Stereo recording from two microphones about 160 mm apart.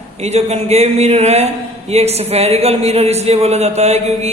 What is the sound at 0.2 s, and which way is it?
A man's voice, 40° right (ahead or behind).